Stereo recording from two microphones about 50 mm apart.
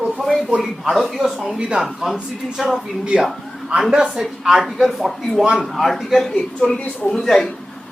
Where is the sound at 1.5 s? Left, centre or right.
Centre.